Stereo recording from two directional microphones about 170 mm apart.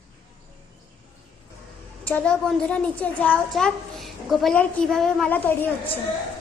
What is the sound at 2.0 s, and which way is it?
A child's voice, 10° left (ahead or behind).